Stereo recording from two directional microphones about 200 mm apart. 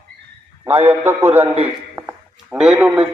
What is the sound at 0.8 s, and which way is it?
A man's voice, 10° right (ahead or behind).